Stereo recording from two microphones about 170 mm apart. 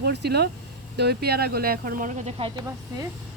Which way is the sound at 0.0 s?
75° right (ahead or behind).